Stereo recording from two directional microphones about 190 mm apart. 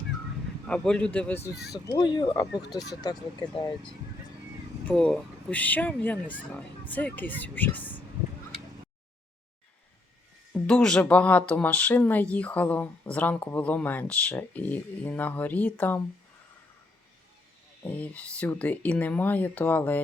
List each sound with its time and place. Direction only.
0.7 s a man's voice: 5° left (ahead or behind)
1.7 s speech: 20° left (ahead or behind)
4.9 s speech: 5° left (ahead or behind)
10.5 s speech: 5° left (ahead or behind)
17.8 s speech: 10° left (ahead or behind)